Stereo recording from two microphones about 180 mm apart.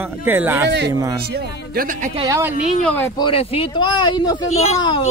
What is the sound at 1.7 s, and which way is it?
Speech, 50° right (ahead or behind).